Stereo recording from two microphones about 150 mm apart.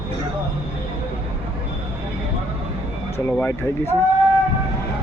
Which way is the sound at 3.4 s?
15° left (ahead or behind).